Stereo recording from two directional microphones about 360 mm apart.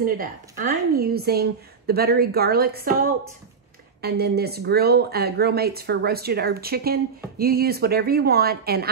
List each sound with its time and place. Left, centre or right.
0.0 s a woman's voice: right